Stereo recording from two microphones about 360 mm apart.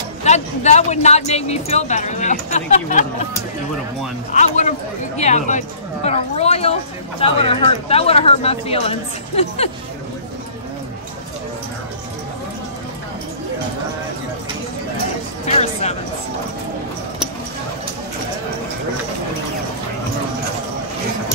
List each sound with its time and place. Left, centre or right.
0.2 s speech: centre
4.3 s speech: centre
15.4 s speech: centre